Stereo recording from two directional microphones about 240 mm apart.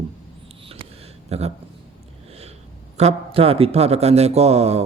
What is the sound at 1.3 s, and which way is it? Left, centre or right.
Speech, right.